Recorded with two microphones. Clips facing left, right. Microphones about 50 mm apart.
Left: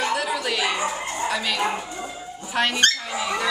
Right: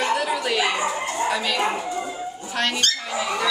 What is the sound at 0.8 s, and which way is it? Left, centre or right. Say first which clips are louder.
Bow-wow: right 2 dB; right.